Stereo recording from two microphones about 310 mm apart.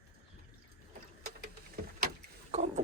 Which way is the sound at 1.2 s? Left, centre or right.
Right.